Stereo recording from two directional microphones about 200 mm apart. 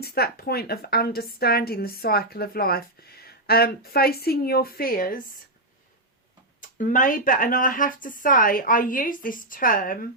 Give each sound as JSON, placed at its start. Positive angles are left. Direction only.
{"t": 0.0, "sound": "a woman's voice", "side_deg": 50}
{"t": 6.6, "sound": "a woman's voice", "side_deg": 40}